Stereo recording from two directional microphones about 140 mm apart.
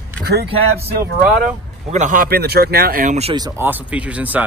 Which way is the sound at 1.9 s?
65° right (ahead or behind).